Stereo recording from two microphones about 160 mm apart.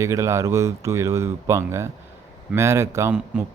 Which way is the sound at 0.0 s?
20° right (ahead or behind).